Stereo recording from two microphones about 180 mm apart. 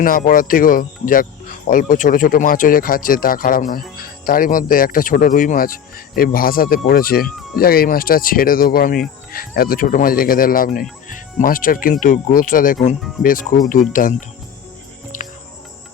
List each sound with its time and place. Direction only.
0.0 s speech: 50° left (ahead or behind)
15.1 s cricket: 45° left (ahead or behind)